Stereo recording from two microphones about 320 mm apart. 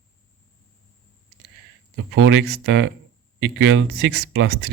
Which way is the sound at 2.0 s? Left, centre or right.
Right.